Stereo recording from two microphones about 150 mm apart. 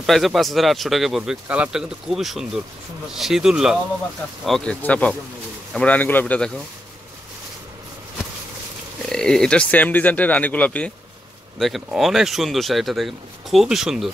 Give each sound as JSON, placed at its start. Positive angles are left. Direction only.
{"t": 0.0, "sound": "speech", "side_deg": 0}
{"t": 9.1, "sound": "speech", "side_deg": 5}